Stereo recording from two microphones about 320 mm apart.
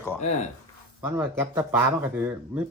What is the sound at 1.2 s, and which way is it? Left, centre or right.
Speech, centre.